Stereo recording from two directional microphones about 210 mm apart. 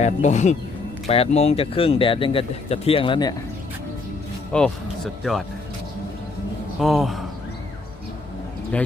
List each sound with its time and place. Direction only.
0.0 s speech: 35° left (ahead or behind)
4.5 s speech: 5° left (ahead or behind)
6.7 s speech: centre (ahead or behind)